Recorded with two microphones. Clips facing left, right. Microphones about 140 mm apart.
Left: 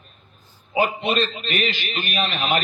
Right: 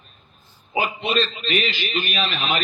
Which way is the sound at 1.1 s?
50° left (ahead or behind).